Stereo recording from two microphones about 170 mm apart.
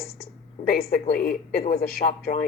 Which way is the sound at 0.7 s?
60° left (ahead or behind).